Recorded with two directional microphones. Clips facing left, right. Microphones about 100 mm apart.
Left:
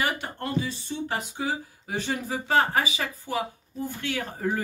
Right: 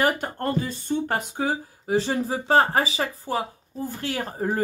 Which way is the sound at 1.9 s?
30° right (ahead or behind).